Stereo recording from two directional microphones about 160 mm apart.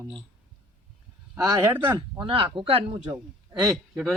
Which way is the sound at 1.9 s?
30° right (ahead or behind).